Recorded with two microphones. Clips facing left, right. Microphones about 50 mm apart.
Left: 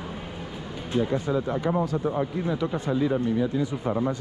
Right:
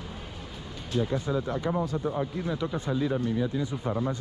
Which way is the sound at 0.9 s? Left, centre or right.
Left.